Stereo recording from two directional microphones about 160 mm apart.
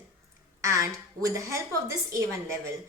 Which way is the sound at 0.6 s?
20° right (ahead or behind).